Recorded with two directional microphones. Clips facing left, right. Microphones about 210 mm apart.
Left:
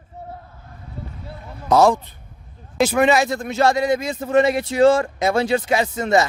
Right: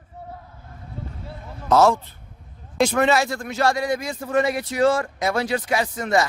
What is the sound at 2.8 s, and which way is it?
Speech, 5° left (ahead or behind).